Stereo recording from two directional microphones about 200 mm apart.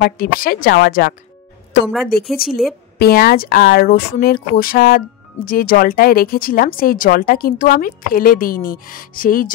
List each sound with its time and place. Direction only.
0.0 s speech: 45° left (ahead or behind)